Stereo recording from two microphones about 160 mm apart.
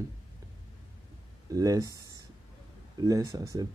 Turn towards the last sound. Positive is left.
turn(degrees=-20)  # may be behind; listen again after turning